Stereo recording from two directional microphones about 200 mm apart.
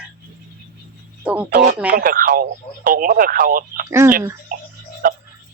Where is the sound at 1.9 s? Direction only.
45° right (ahead or behind).